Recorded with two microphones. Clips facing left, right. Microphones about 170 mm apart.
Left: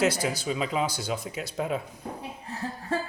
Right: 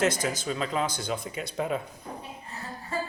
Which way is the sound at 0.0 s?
10° left (ahead or behind).